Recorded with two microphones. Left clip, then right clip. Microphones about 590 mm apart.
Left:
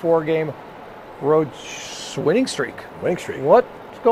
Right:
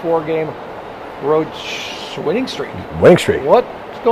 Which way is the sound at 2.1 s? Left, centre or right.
Left.